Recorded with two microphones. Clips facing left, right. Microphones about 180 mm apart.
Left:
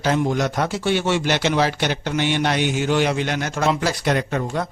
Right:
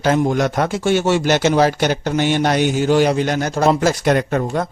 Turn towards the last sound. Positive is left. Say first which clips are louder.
# right 4 dB
turn(degrees=-50)  # may be behind; listen again after turning